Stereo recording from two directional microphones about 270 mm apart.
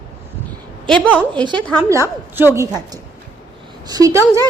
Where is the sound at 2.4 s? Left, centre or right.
Centre.